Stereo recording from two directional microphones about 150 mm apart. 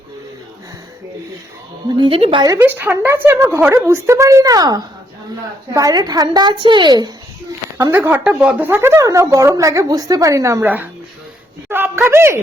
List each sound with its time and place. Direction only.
2.0 s a woman's voice: 35° right (ahead or behind)
2.6 s a woman's voice: 15° right (ahead or behind); by 7.1 s 30° right (ahead or behind)
7.8 s a woman's voice: 15° right (ahead or behind)